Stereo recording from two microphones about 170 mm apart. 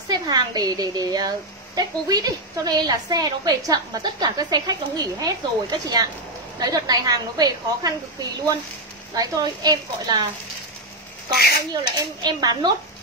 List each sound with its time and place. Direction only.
0.1 s a woman's voice: 25° right (ahead or behind)
11.7 s a woman's voice: 25° right (ahead or behind)